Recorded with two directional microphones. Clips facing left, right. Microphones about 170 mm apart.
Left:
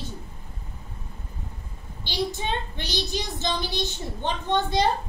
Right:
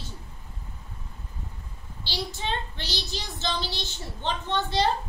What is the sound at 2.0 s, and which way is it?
A woman's voice, 15° left (ahead or behind).